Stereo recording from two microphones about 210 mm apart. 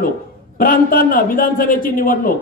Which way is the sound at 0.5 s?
40° left (ahead or behind).